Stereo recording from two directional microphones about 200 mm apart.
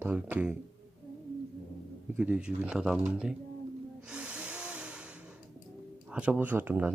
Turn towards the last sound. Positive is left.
turn(degrees=-10)  # may be behind; listen again after turning